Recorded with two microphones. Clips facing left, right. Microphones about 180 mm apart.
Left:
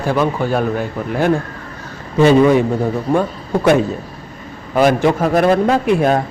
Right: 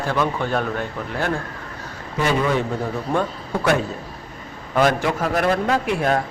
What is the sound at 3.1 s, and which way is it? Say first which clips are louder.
Speech: left 6 dB; 5° left (ahead or behind).